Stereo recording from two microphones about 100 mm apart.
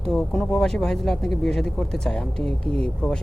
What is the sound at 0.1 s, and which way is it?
Speech, 5° left (ahead or behind).